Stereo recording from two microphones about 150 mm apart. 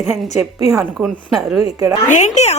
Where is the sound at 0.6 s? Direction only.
25° right (ahead or behind).